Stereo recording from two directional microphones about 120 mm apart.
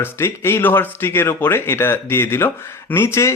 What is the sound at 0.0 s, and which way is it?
Speech, 20° left (ahead or behind).